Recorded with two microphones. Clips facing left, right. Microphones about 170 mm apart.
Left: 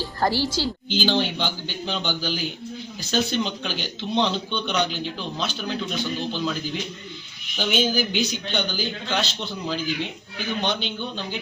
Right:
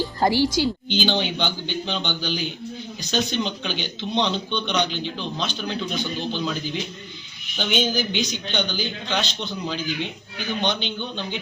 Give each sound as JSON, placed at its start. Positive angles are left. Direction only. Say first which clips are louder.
{"t": 0.2, "sound": "a woman's voice", "louder": "right 3 dB", "side_deg": -15}
{"t": 0.9, "sound": "a man's voice", "louder": "even", "side_deg": 0}